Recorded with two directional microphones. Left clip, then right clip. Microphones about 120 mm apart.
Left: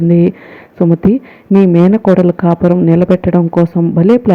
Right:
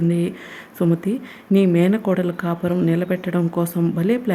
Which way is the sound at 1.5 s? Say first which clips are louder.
Left 8 dB; 35° left (ahead or behind).